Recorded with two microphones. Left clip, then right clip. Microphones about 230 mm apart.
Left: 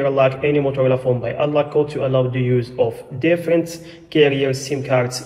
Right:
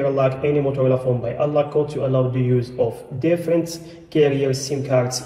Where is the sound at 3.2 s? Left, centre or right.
Centre.